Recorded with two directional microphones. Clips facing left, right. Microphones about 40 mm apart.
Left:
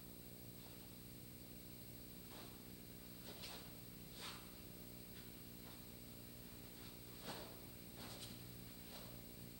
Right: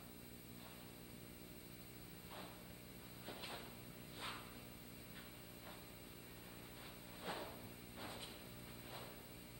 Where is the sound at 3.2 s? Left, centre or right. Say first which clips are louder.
Right 6 dB; right.